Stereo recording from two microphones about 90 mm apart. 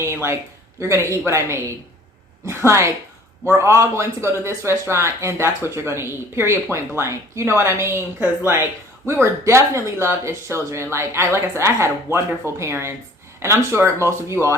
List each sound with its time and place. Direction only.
0.0 s speech: 30° right (ahead or behind)